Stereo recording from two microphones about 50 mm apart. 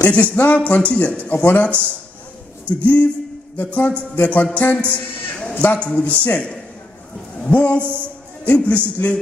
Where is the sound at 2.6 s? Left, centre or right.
Left.